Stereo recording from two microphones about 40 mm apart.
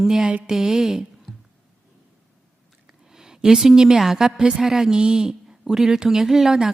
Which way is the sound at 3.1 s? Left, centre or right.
Centre.